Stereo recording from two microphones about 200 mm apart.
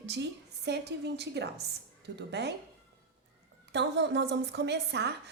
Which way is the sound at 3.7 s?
60° right (ahead or behind).